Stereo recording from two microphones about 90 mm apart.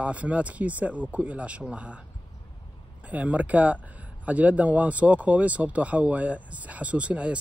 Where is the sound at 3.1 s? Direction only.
15° right (ahead or behind).